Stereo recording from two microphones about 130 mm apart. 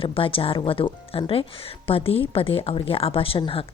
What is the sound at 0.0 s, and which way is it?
A woman's voice, 45° left (ahead or behind).